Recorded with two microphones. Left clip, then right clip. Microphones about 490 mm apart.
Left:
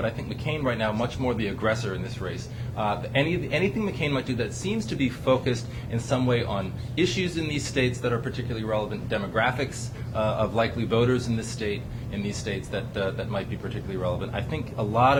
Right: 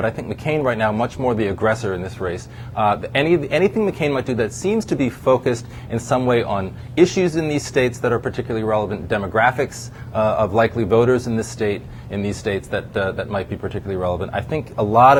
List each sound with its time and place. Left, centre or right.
0.0 s speech: right